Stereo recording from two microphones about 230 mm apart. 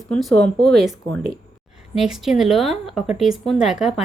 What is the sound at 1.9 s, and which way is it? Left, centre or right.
Speech, centre.